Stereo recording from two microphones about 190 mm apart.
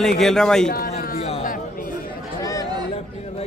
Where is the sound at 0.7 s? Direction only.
50° left (ahead or behind).